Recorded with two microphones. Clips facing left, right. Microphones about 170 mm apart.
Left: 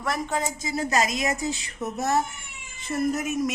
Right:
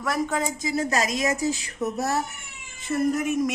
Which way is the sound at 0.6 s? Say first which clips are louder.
Right 3 dB; 40° left (ahead or behind).